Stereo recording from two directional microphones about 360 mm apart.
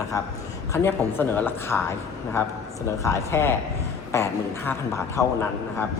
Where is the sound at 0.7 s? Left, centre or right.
Centre.